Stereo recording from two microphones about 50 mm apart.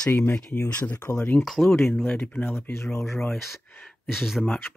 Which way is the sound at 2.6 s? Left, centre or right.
Left.